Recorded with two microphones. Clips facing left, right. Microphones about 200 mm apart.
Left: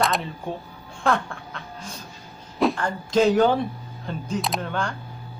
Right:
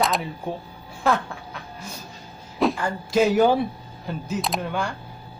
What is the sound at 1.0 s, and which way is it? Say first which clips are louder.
Duck: right 1 dB; 5° right (ahead or behind).